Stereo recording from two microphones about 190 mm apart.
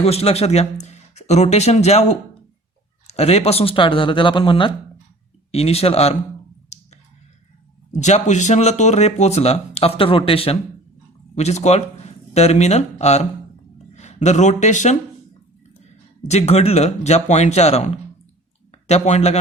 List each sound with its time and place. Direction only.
0.0 s speech: 30° left (ahead or behind)
3.1 s speech: 35° left (ahead or behind)
7.9 s speech: 40° left (ahead or behind)
16.2 s speech: 35° left (ahead or behind)